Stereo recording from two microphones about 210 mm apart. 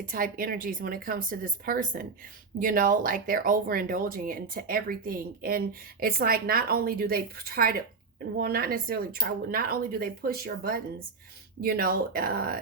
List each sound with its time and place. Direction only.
0.0 s a woman's voice: 40° right (ahead or behind)